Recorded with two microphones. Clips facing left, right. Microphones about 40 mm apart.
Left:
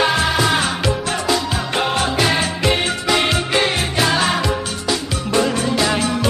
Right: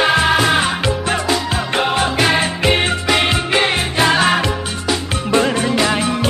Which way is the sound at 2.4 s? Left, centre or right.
Right.